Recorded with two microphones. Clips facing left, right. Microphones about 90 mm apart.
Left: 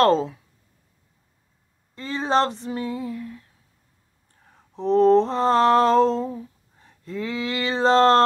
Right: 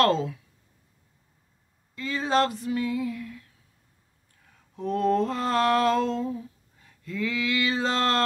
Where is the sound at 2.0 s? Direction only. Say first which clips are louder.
Left 3 dB; 30° left (ahead or behind).